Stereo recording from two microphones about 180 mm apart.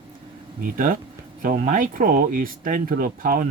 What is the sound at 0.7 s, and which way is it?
Speech, 50° right (ahead or behind).